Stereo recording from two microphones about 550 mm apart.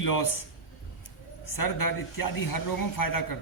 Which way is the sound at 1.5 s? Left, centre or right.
Left.